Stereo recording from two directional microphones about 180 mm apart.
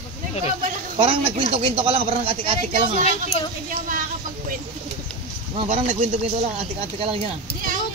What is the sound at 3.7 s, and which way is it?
Speech, 50° right (ahead or behind).